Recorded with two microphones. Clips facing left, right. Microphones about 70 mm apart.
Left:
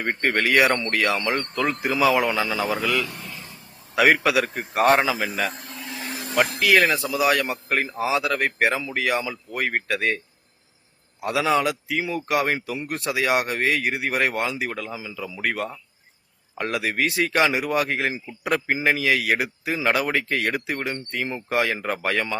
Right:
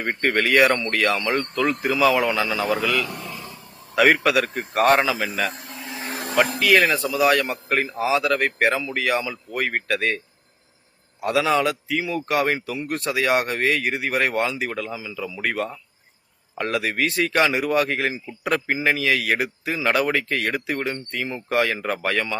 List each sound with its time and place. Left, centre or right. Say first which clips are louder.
0.0 s a man's voice: right 1 dB; centre
2.8 s a man's voice: right 1 dB; centre
5.8 s vehicle: right 1 dB; right
6.3 s a man's voice: right 1 dB; centre
11.2 s a man's voice: right 1 dB; centre